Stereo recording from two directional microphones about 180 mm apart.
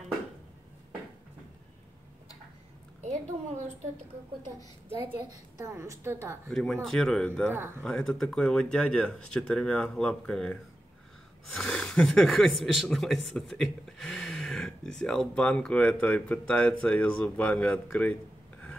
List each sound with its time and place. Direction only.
3.0 s a sound: 40° right (ahead or behind)
4.8 s a woman's voice: 15° right (ahead or behind)
6.5 s speech: 5° left (ahead or behind)
7.5 s a woman's voice: 10° right (ahead or behind)
7.8 s speech: 5° left (ahead or behind)